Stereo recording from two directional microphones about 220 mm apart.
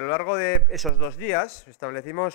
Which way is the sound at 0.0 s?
25° left (ahead or behind).